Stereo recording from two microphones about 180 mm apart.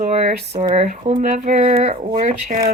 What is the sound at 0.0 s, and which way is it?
Speech, 50° right (ahead or behind).